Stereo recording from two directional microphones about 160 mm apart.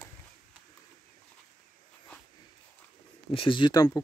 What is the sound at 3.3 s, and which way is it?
Speech, 30° left (ahead or behind).